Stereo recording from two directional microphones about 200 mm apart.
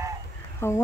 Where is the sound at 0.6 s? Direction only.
10° left (ahead or behind).